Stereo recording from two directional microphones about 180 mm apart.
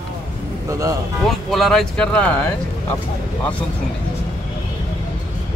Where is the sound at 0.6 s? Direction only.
15° right (ahead or behind).